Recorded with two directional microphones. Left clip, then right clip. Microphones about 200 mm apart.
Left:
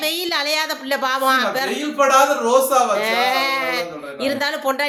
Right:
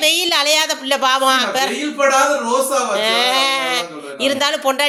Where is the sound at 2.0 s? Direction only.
25° left (ahead or behind).